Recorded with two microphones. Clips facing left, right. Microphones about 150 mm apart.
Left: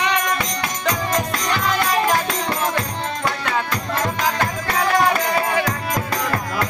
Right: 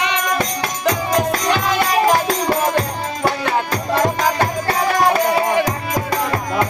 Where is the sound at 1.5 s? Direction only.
15° right (ahead or behind).